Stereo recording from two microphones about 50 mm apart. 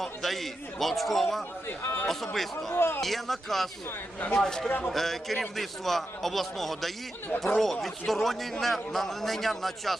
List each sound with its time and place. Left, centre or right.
0.0 s a man's voice: centre
1.6 s speech: left
2.0 s a man's voice: centre
2.7 s speech: left
3.0 s a man's voice: centre